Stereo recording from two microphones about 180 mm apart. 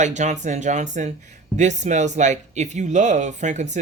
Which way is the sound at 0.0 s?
40° right (ahead or behind).